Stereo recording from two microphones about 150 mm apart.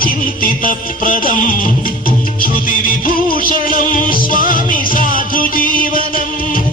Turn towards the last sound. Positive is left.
turn(degrees=65)  # may be behind; listen again after turning